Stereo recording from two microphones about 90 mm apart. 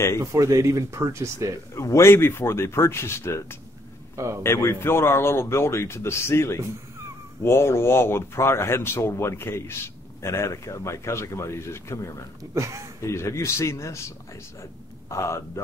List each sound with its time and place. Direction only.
0.2 s speech: 35° right (ahead or behind)
1.8 s speech: 30° left (ahead or behind)
12.5 s speech: 35° right (ahead or behind)
13.0 s speech: 30° left (ahead or behind)